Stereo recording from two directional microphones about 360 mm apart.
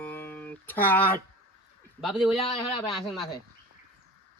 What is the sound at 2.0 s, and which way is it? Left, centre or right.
Speech, centre.